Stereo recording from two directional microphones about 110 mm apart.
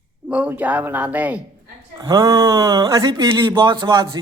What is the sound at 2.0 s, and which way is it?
Speech, 30° right (ahead or behind).